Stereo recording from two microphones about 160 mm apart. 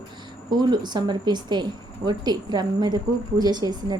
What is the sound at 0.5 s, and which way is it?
A woman's voice, 25° right (ahead or behind).